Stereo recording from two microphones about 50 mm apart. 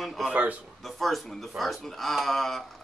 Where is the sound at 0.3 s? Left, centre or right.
Right.